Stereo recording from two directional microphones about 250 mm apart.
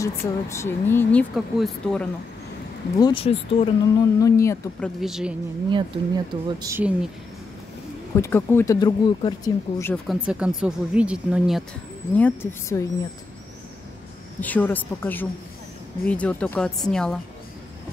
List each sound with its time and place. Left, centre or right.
0.0 s speech: centre
3.0 s speech: centre
5.7 s speech: centre
8.2 s speech: centre
10.0 s speech: centre
12.2 s speech: centre
14.4 s speech: centre